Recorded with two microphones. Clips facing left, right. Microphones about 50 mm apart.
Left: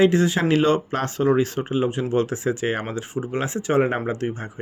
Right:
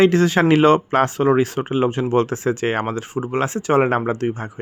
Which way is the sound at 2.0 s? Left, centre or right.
Right.